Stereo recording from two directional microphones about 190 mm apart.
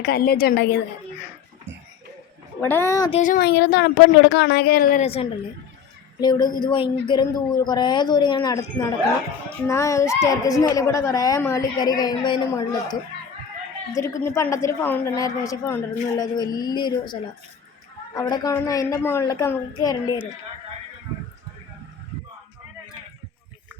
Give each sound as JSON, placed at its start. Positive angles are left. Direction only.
{"t": 0.0, "sound": "a woman's voice", "side_deg": 55}
{"t": 2.6, "sound": "a child's voice", "side_deg": 10}
{"t": 3.1, "sound": "speech", "side_deg": 40}
{"t": 3.4, "sound": "a woman's voice", "side_deg": 60}
{"t": 5.0, "sound": "speech", "side_deg": 30}
{"t": 6.1, "sound": "a woman's voice", "side_deg": 20}